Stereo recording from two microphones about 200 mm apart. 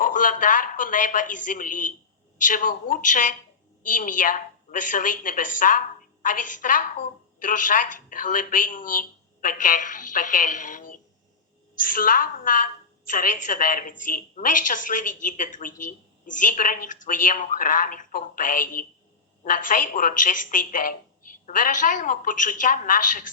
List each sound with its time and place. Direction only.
0.0 s a woman's voice: 40° left (ahead or behind)